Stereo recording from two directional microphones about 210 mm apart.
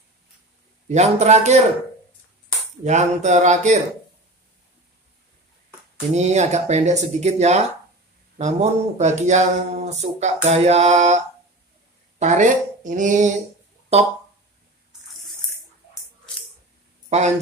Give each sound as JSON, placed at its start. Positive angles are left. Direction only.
{"t": 0.8, "sound": "speech", "side_deg": -35}
{"t": 2.8, "sound": "speech", "side_deg": -35}
{"t": 6.1, "sound": "speech", "side_deg": -30}
{"t": 12.2, "sound": "speech", "side_deg": -35}
{"t": 17.1, "sound": "speech", "side_deg": -30}